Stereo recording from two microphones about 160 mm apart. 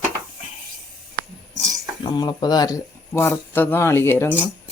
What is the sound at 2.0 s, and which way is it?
Speech, 25° left (ahead or behind).